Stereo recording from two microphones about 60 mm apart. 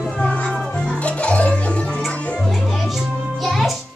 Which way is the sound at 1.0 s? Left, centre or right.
Left.